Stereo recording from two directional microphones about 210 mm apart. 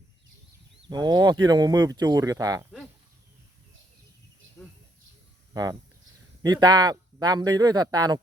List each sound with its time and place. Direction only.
0.9 s speech: 20° right (ahead or behind)
6.4 s speech: 20° right (ahead or behind)